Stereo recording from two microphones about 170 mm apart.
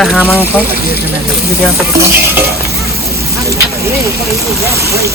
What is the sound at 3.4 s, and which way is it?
Vehicle, 15° right (ahead or behind).